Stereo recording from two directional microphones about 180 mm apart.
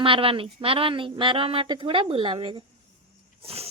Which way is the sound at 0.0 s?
30° right (ahead or behind).